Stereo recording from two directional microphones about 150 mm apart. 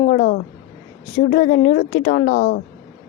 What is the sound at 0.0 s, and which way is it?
A woman's voice, 65° left (ahead or behind).